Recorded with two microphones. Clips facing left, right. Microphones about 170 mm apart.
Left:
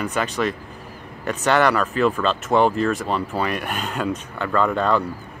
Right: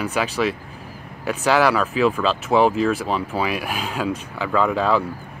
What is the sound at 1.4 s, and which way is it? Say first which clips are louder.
Speech: even; centre (ahead or behind).